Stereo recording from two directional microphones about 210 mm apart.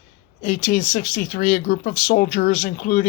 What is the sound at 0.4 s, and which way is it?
Speech, 40° left (ahead or behind).